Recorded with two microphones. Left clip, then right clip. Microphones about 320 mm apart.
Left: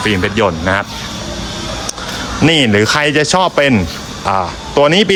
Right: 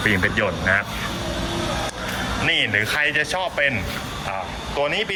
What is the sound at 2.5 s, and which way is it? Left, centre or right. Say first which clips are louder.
Speech: left 9 dB; centre.